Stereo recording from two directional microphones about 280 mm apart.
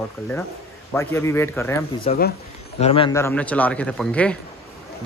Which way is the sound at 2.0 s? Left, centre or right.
Left.